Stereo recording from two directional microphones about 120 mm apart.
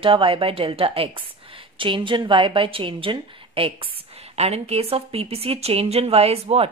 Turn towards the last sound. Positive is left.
turn(degrees=-55)  # may be behind; listen again after turning